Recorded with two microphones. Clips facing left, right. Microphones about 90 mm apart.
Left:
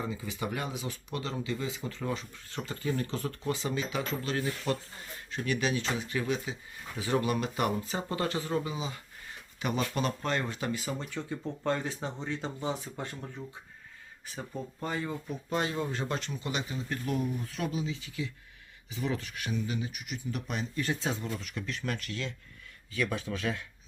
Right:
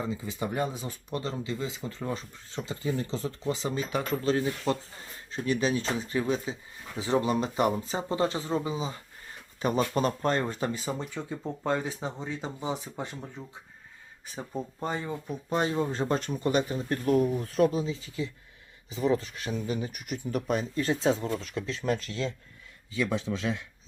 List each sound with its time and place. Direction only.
0.1 s speech: 30° right (ahead or behind)
3.9 s speech: 50° right (ahead or behind)
4.2 s speech: 30° right (ahead or behind)
11.1 s speech: 15° right (ahead or behind)
14.3 s speech: 20° right (ahead or behind)